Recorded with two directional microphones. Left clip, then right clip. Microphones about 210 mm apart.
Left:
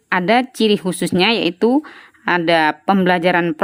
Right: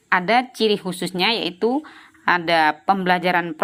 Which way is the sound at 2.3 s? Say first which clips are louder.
Left 4 dB; 55° left (ahead or behind).